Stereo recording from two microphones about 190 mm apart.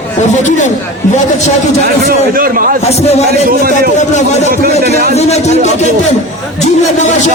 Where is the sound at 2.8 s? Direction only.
35° left (ahead or behind).